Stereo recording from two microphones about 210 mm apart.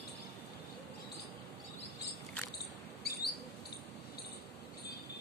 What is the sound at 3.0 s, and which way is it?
Mouse, 50° left (ahead or behind).